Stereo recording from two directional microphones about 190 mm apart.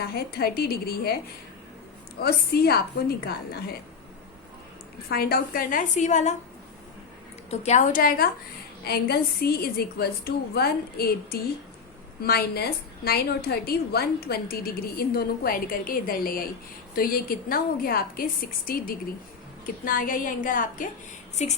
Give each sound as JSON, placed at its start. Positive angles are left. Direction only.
{"t": 0.0, "sound": "a woman's voice", "side_deg": 55}
{"t": 2.1, "sound": "a woman's voice", "side_deg": 55}
{"t": 5.0, "sound": "a woman's voice", "side_deg": 55}
{"t": 7.6, "sound": "a woman's voice", "side_deg": 40}